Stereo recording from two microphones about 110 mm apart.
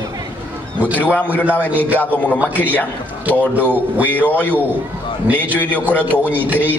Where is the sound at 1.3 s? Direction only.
15° left (ahead or behind).